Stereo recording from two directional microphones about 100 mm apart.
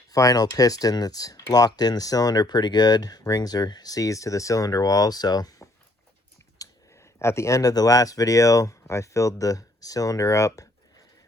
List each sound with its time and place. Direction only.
0.1 s speech: 35° left (ahead or behind)